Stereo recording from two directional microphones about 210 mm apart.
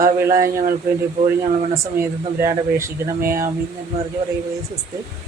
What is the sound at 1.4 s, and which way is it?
Speech, 15° right (ahead or behind).